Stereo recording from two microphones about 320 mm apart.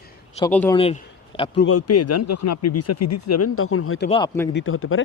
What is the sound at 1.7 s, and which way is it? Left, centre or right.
Speech, left.